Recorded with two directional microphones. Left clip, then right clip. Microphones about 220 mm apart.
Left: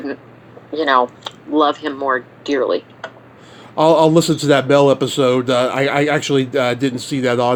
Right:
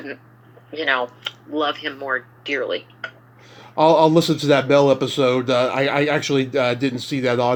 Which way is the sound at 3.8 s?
25° left (ahead or behind).